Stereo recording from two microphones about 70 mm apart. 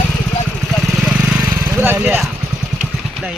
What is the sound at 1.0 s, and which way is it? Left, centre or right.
Vehicle, centre.